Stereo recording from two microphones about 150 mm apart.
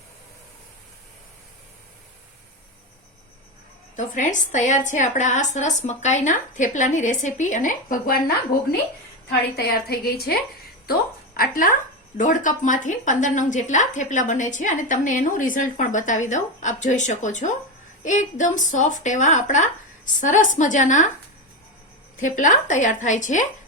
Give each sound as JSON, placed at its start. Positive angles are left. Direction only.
{"t": 3.9, "sound": "speech", "side_deg": 55}
{"t": 9.3, "sound": "a woman's voice", "side_deg": 90}
{"t": 11.3, "sound": "speech", "side_deg": 65}
{"t": 22.2, "sound": "speech", "side_deg": 55}